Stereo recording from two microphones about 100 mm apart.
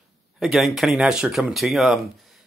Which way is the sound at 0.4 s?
Centre (ahead or behind).